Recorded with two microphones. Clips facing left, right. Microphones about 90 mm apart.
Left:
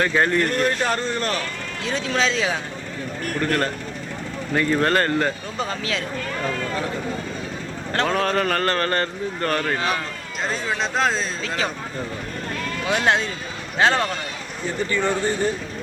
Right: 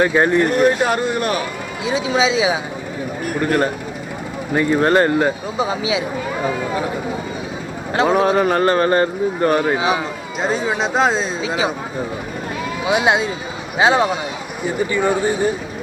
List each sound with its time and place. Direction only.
0.0 s speech: 15° right (ahead or behind)